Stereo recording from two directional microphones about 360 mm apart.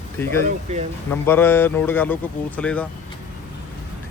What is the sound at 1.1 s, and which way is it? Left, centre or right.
A man's voice, centre.